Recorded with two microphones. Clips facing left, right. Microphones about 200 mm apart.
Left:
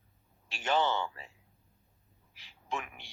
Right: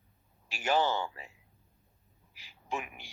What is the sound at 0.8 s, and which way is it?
Speech, 35° right (ahead or behind).